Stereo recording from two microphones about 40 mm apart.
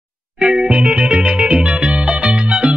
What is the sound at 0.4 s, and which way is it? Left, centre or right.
Music, centre.